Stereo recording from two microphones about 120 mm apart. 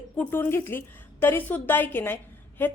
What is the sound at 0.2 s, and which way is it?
A woman's voice, 20° left (ahead or behind).